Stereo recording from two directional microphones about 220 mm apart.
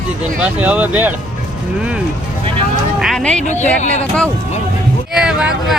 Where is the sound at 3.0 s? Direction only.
Centre (ahead or behind).